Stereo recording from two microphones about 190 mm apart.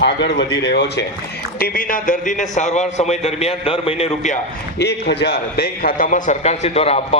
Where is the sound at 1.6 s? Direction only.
50° left (ahead or behind).